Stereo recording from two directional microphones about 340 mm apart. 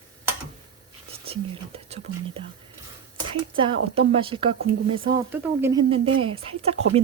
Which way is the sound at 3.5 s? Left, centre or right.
Centre.